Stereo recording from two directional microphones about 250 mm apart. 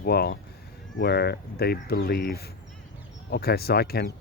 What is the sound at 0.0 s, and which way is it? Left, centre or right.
Speech, left.